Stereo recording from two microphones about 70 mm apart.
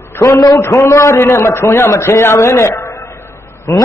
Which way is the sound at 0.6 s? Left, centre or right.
Left.